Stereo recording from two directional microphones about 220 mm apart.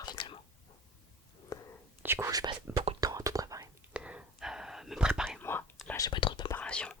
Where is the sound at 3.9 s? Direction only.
5° right (ahead or behind).